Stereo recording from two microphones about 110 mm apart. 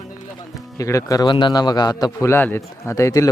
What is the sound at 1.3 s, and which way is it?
A man's voice, 45° left (ahead or behind).